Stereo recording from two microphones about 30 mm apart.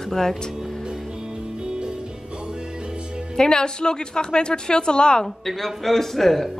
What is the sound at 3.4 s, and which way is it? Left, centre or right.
A woman's voice, left.